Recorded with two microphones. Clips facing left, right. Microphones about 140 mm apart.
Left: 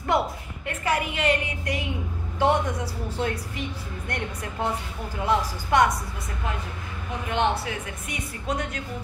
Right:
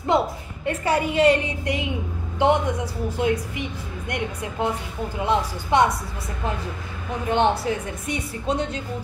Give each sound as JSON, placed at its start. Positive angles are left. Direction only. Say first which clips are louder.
{"t": 0.1, "sound": "a sound", "louder": "right 3 dB", "side_deg": -25}
{"t": 0.7, "sound": "a woman's voice", "louder": "right 4 dB", "side_deg": -30}
{"t": 7.2, "sound": "a woman's voice", "louder": "right 5 dB", "side_deg": -30}